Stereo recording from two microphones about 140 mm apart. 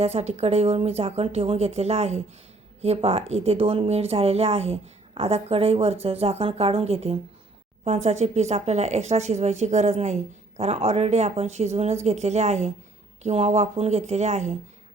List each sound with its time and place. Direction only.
0.0 s speech: 50° right (ahead or behind)